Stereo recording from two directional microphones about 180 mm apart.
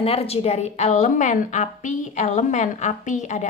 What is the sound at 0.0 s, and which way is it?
Speech, 35° left (ahead or behind).